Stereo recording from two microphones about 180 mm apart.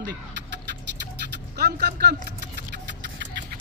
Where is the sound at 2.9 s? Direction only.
75° right (ahead or behind).